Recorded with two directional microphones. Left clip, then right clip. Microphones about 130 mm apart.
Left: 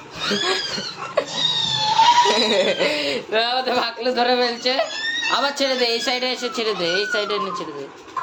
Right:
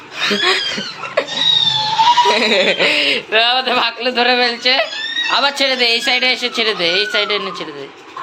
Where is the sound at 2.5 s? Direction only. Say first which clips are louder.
Right 5 dB; 15° right (ahead or behind).